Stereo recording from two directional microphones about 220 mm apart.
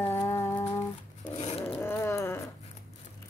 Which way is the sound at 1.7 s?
10° left (ahead or behind).